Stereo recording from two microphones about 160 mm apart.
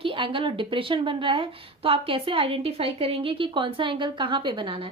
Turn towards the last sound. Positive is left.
turn(degrees=-30)  # may be behind; listen again after turning